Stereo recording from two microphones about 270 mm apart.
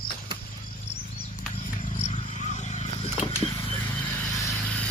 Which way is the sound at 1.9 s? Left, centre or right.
Left.